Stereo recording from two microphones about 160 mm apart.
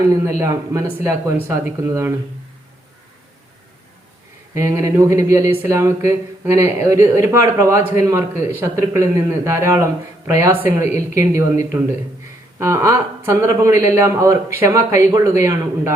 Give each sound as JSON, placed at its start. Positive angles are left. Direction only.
{"t": 0.3, "sound": "a man's voice", "side_deg": -20}
{"t": 4.5, "sound": "speech", "side_deg": -15}